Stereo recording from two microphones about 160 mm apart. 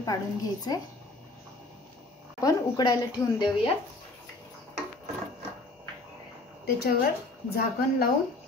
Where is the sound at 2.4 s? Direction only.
25° left (ahead or behind).